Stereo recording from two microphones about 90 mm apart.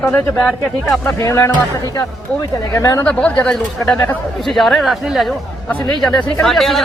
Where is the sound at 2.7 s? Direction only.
40° left (ahead or behind).